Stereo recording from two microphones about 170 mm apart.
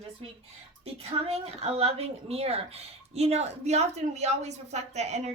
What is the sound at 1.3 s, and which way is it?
Speech, 35° right (ahead or behind).